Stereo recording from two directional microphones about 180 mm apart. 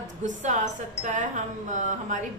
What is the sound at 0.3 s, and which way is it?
A woman's voice, 45° right (ahead or behind).